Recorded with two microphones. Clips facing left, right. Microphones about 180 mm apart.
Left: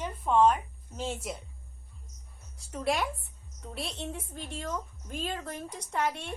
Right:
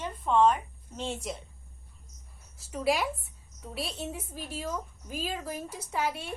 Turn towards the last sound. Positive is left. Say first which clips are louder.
# even
turn(degrees=-5)  # may be behind; listen again after turning